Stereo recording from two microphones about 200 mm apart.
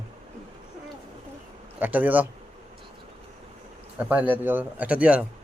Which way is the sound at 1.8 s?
10° right (ahead or behind).